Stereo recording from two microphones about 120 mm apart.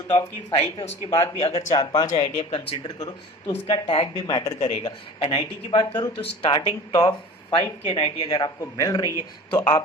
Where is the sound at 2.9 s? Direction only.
40° left (ahead or behind).